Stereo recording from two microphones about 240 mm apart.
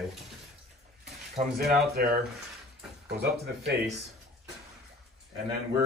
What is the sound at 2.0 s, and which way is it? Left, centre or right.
Speech, right.